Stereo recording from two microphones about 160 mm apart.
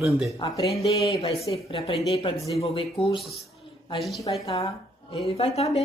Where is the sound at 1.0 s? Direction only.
35° left (ahead or behind).